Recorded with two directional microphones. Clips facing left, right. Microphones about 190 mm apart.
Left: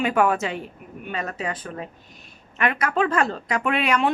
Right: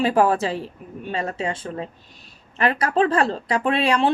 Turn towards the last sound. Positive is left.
turn(degrees=-30)  # may be behind; listen again after turning